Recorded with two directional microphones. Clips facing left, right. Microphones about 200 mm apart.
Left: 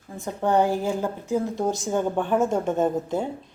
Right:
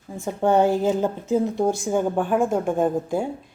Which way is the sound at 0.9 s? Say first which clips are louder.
Right 4 dB; 20° right (ahead or behind).